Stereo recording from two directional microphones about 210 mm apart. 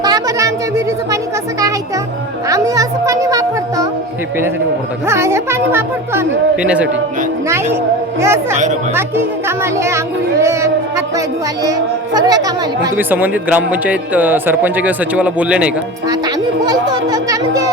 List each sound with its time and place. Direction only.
0.0 s a sound: 15° right (ahead or behind)
2.5 s music: 15° right (ahead or behind)
5.0 s a woman's voice: 15° right (ahead or behind)
9.7 s a woman's voice: 15° right (ahead or behind)
12.1 s a woman's voice: 20° right (ahead or behind)
16.9 s a child's voice: 20° right (ahead or behind)